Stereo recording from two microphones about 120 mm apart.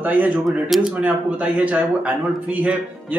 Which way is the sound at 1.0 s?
10° right (ahead or behind).